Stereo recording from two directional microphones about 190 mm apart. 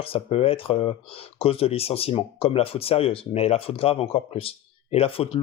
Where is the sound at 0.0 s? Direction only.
30° left (ahead or behind).